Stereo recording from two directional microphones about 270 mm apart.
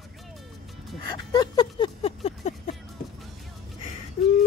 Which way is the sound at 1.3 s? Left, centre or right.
Centre.